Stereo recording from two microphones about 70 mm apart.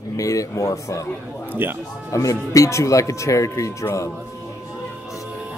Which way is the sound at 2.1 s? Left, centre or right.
Left.